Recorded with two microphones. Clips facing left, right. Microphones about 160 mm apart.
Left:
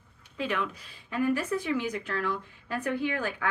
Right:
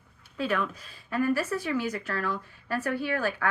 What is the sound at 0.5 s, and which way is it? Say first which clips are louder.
Speech: right 3 dB; 45° right (ahead or behind).